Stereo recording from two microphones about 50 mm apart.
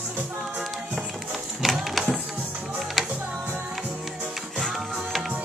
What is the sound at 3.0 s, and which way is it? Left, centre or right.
Music, centre.